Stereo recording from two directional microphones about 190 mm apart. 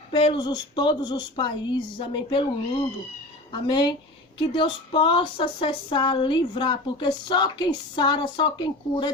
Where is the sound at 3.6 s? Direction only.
25° left (ahead or behind).